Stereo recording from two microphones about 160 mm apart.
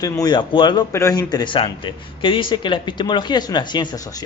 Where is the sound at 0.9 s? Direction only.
20° left (ahead or behind).